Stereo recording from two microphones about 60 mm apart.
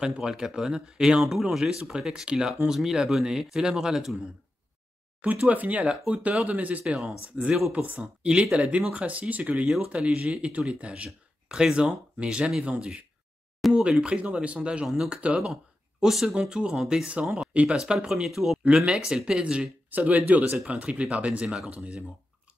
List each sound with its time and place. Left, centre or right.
0.0 s speech: centre
5.2 s speech: right
6.8 s speech: centre
13.6 s a sound: centre
14.0 s speech: centre
16.3 s speech: centre
19.9 s speech: right